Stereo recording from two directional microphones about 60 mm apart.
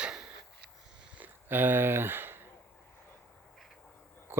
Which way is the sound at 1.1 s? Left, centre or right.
Right.